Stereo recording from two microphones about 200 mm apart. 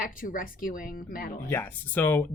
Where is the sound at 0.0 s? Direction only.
45° left (ahead or behind).